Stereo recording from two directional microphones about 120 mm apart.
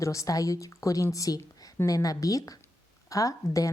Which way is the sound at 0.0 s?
25° left (ahead or behind).